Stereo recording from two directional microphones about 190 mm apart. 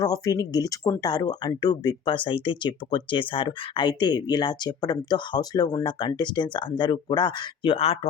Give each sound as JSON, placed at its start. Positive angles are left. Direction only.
{"t": 0.0, "sound": "speech", "side_deg": 20}